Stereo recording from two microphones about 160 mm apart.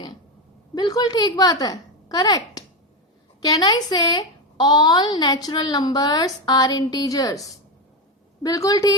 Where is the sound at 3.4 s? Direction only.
25° left (ahead or behind).